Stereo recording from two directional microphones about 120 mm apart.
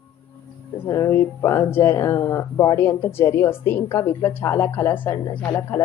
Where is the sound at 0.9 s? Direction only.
25° left (ahead or behind).